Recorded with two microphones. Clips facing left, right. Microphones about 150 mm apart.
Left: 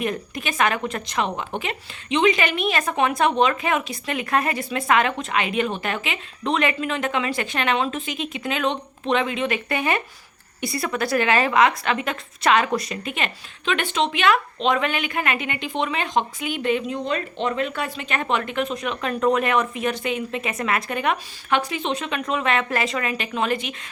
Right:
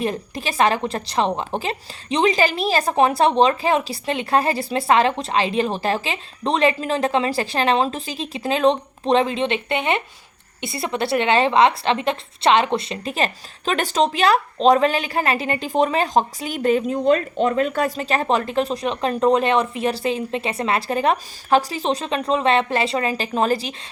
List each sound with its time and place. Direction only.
0.0 s a woman's voice: 30° right (ahead or behind)